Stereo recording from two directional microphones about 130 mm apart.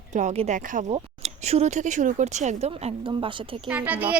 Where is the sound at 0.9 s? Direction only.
55° right (ahead or behind).